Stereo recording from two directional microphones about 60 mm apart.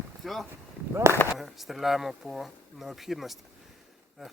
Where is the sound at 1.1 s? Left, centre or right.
Right.